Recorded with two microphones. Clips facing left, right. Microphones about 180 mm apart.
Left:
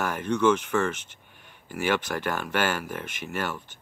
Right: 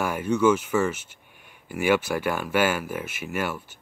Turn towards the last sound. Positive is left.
turn(degrees=-10)  # may be behind; listen again after turning